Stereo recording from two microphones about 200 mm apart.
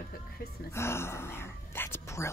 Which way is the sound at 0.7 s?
15° left (ahead or behind).